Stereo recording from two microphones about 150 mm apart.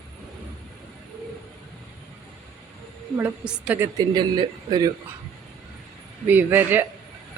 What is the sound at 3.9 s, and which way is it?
Speech, 30° right (ahead or behind).